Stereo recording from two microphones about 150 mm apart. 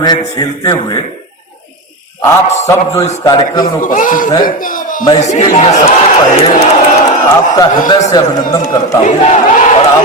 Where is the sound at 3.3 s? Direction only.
30° left (ahead or behind).